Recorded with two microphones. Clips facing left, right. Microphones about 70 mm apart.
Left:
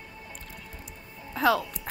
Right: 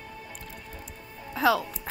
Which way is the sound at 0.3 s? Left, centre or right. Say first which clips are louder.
Right 2 dB; centre.